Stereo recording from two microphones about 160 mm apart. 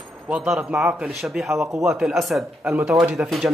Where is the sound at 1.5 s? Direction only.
20° right (ahead or behind).